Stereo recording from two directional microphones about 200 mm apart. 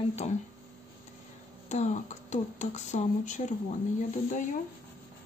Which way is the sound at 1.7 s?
35° left (ahead or behind).